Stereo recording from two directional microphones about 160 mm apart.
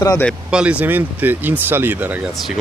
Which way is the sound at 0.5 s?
5° right (ahead or behind).